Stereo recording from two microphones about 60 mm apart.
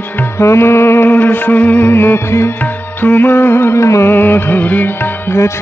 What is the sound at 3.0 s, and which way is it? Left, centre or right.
Music, left.